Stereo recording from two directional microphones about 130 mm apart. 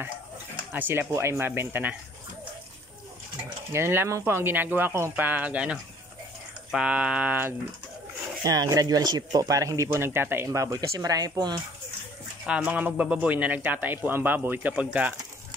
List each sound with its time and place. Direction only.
0.7 s a man's voice: 15° right (ahead or behind)
3.7 s a man's voice: 20° right (ahead or behind)
8.5 s speech: 30° right (ahead or behind)
12.4 s a man's voice: 5° right (ahead or behind)